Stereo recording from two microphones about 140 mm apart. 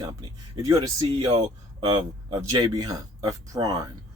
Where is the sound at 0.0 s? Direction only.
25° right (ahead or behind).